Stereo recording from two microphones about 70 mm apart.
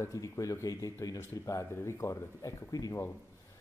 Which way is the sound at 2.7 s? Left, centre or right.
Left.